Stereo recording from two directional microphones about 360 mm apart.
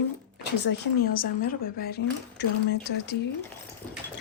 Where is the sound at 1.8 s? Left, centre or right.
Left.